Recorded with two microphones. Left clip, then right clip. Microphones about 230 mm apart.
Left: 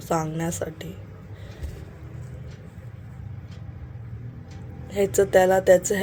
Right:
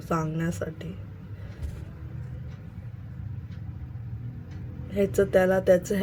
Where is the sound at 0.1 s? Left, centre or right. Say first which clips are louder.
Left 4 dB; centre.